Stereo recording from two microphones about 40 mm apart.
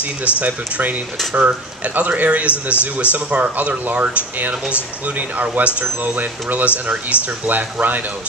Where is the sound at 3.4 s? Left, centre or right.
Right.